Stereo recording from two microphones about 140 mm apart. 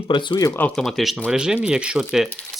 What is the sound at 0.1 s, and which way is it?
Speech, 35° left (ahead or behind).